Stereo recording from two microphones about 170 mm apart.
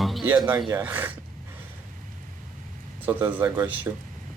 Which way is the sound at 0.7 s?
10° right (ahead or behind).